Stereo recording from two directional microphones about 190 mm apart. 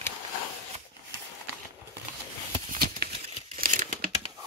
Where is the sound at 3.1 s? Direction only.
35° right (ahead or behind).